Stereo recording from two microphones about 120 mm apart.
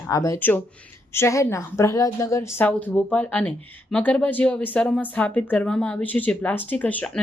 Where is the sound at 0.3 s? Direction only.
15° left (ahead or behind).